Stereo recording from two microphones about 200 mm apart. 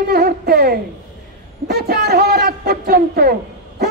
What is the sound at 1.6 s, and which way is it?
A man's voice, 55° right (ahead or behind).